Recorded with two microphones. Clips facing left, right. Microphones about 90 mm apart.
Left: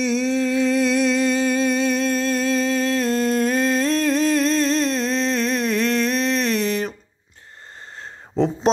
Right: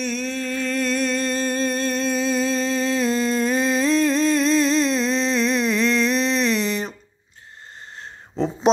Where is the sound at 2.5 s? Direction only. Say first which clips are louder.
Left 2 dB; 60° left (ahead or behind).